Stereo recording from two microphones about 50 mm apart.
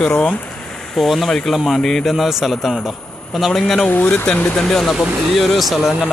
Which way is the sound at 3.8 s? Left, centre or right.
Left.